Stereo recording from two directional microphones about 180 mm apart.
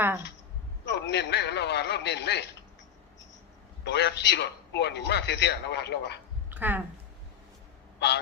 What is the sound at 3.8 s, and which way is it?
A man's voice, 70° left (ahead or behind).